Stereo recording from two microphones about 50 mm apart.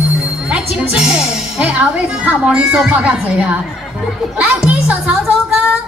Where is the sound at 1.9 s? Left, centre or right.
Right.